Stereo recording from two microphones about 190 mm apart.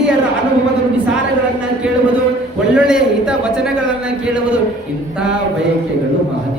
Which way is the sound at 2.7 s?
5° right (ahead or behind).